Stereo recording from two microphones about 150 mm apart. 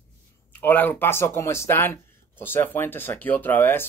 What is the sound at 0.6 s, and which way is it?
Speech, 10° left (ahead or behind).